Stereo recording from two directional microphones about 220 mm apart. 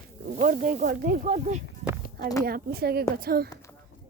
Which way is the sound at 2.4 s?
45° right (ahead or behind).